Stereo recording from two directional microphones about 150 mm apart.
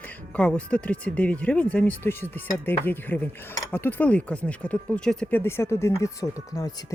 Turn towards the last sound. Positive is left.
turn(degrees=25)  # may be behind; listen again after turning